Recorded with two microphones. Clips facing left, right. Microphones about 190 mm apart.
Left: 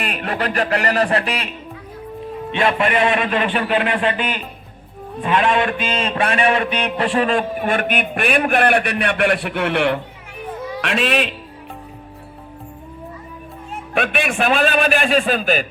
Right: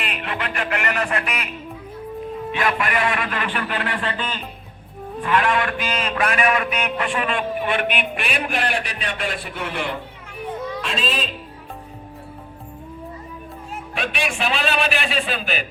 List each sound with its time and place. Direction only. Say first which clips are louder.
0.0 s music: left 5 dB; 40° left (ahead or behind)
2.5 s a man's voice: left 5 dB; 25° left (ahead or behind); by 11.3 s 75° left (ahead or behind)
13.9 s a man's voice: left 6 dB; 55° left (ahead or behind)